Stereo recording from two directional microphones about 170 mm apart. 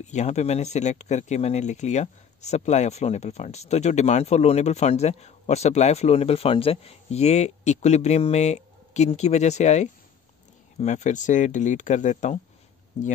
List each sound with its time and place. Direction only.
0.0 s speech: 40° left (ahead or behind)